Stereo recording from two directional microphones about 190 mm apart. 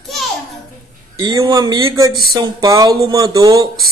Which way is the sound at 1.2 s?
20° right (ahead or behind).